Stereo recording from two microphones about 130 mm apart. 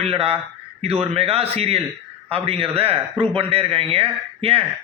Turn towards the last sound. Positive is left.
turn(degrees=-50)  # may be behind; listen again after turning